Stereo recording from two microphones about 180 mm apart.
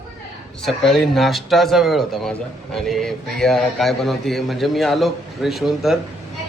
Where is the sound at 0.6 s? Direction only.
Centre (ahead or behind).